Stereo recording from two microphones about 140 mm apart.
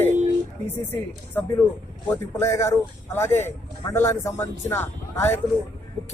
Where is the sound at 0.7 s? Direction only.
15° left (ahead or behind).